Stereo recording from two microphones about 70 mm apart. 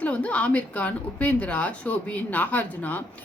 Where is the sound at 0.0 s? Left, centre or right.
Centre.